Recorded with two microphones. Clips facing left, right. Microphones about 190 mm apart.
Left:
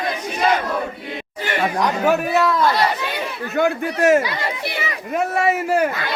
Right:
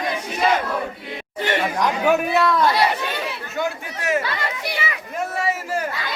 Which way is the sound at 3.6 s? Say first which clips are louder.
Left 9 dB; 55° left (ahead or behind).